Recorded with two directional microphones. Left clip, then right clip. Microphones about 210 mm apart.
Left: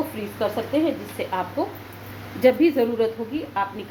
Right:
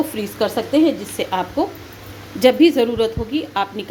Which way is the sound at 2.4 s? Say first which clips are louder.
Right 5 dB; 35° right (ahead or behind).